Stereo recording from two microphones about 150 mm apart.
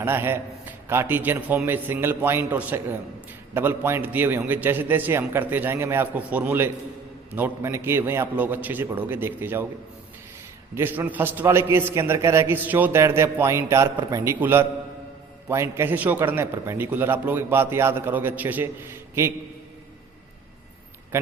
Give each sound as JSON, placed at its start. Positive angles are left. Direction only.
{"t": 0.0, "sound": "a man's voice", "side_deg": -15}
{"t": 10.8, "sound": "a man's voice", "side_deg": -15}